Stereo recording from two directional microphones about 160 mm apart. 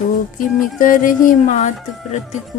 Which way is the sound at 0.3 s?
55° left (ahead or behind).